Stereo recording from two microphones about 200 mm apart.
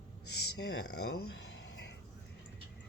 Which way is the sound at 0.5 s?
60° left (ahead or behind).